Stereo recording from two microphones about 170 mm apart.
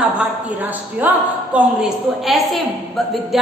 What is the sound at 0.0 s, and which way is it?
A man's voice, 10° right (ahead or behind).